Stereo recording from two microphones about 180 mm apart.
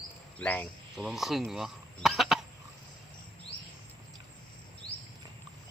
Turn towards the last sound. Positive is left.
turn(degrees=85)